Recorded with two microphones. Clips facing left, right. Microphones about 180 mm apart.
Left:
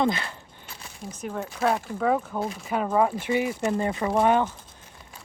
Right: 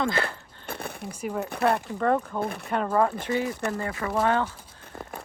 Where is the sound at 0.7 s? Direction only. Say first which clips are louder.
Right 6 dB; 60° right (ahead or behind).